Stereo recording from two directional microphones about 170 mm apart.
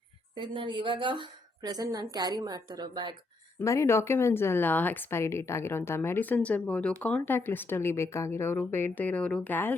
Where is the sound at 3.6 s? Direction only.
15° left (ahead or behind).